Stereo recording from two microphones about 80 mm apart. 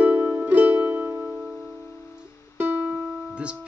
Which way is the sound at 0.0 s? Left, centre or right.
Right.